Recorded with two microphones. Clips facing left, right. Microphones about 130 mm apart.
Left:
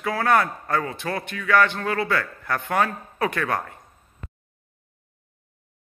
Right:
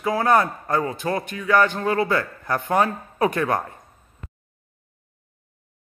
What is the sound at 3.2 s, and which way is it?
Speech, 20° right (ahead or behind).